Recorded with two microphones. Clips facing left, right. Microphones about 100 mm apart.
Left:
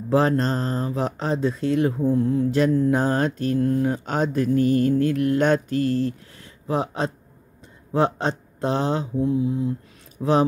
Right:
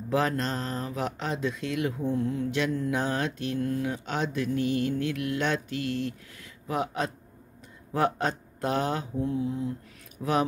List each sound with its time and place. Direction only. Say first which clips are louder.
0.1 s speech: left 7 dB; 35° left (ahead or behind)
7.9 s mantra: left 5 dB; 25° left (ahead or behind)
10.2 s speech: left 8 dB; 30° left (ahead or behind)